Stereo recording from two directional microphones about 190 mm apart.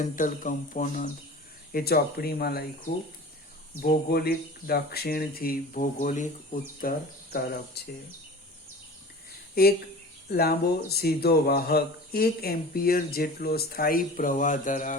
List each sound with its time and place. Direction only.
0.0 s speech: 45° left (ahead or behind)
9.6 s speech: 55° left (ahead or behind)